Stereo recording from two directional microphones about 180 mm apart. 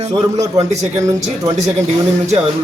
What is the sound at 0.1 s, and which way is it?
Speech, 20° right (ahead or behind).